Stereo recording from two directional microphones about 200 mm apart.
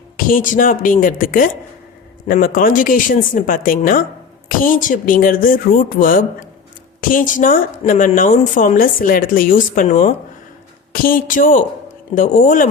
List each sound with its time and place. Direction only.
0.3 s a woman's voice: 45° left (ahead or behind)